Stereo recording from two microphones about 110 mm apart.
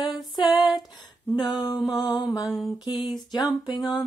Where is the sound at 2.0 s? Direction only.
35° left (ahead or behind).